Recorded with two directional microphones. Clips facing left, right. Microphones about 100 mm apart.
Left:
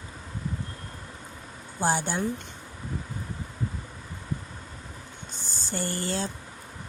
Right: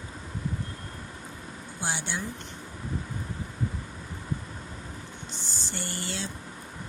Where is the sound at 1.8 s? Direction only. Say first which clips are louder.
Left 7 dB; 45° left (ahead or behind).